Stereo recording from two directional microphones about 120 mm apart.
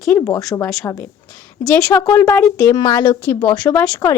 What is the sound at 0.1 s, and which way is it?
Speech, 25° left (ahead or behind).